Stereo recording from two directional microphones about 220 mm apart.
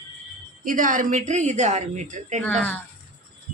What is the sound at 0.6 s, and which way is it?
A woman's voice, 35° right (ahead or behind).